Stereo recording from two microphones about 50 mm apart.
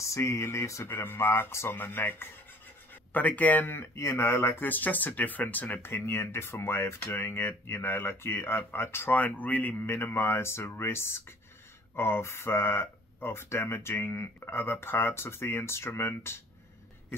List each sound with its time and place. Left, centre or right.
0.0 s speech: left
0.9 s speech: left
3.1 s speech: left
3.7 s speech: left
4.6 s speech: left
5.8 s speech: left
7.1 s speech: left
9.2 s speech: left
9.8 s speech: left